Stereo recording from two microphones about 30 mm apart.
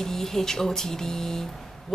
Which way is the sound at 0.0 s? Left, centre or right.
Centre.